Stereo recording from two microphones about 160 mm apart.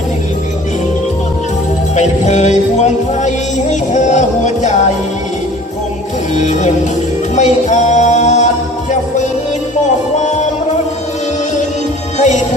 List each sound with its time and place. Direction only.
2.0 s music: 45° left (ahead or behind)
6.3 s music: 45° left (ahead or behind)
12.1 s music: 45° left (ahead or behind)